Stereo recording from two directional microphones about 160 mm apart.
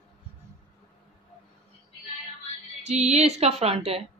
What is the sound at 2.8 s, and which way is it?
A woman's voice, 45° right (ahead or behind).